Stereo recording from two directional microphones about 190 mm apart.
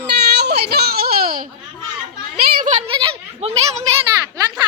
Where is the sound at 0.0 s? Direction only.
60° right (ahead or behind).